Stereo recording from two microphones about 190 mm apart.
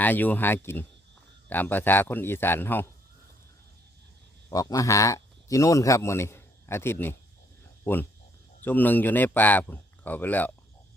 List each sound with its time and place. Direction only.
0.0 s speech: 10° left (ahead or behind)
4.4 s a man's voice: 15° left (ahead or behind)